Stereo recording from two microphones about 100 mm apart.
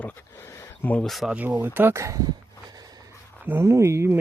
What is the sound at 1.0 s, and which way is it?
Speech, centre (ahead or behind).